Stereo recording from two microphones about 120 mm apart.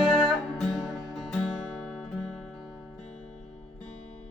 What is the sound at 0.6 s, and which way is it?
Music, 5° left (ahead or behind).